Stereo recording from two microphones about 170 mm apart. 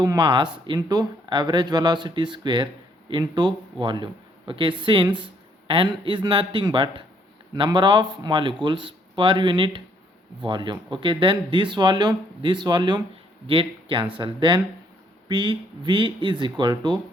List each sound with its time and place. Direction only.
0.0 s a man's voice: 25° right (ahead or behind)